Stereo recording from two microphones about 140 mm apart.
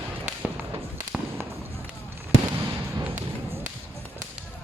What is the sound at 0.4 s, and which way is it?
Fireworks, 15° right (ahead or behind).